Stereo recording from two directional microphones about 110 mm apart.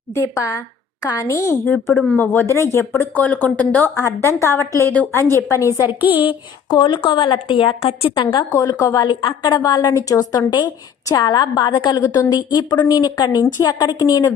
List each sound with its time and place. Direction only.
0.1 s a woman's voice: 25° left (ahead or behind)
3.9 s a woman's voice: 25° left (ahead or behind)
6.0 s speech: 15° right (ahead or behind)
6.7 s a woman's voice: 45° left (ahead or behind)
8.5 s a woman's voice: 25° left (ahead or behind)